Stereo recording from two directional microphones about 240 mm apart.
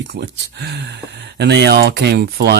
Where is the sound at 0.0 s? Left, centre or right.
Right.